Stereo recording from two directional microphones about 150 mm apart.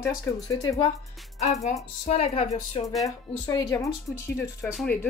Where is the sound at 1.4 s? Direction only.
50° left (ahead or behind).